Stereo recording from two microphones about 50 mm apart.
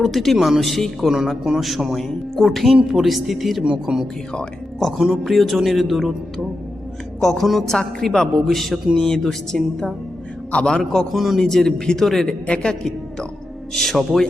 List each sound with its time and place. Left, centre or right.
0.0 s a woman's voice: centre
3.6 s speech: centre
5.2 s a woman's voice: centre
7.2 s a woman's voice: centre
7.8 s a woman's voice: centre
10.5 s speech: centre
11.1 s a woman's voice: centre
11.3 s speech: centre
13.7 s speech: centre